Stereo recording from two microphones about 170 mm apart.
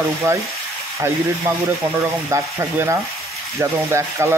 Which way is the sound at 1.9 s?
15° right (ahead or behind).